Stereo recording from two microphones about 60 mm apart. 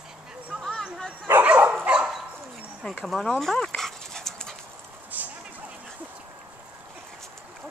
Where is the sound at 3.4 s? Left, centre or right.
Centre.